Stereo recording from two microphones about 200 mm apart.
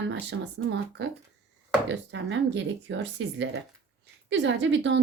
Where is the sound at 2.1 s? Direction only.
65° right (ahead or behind).